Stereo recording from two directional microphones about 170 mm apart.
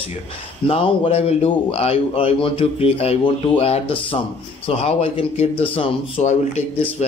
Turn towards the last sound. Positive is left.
turn(degrees=40)  # may be behind; listen again after turning